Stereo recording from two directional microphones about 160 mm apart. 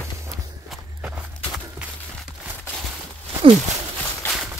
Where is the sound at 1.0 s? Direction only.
5° right (ahead or behind).